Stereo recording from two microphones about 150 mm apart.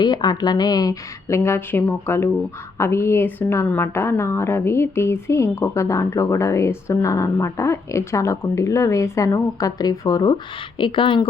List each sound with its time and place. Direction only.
0.0 s speech: 30° left (ahead or behind)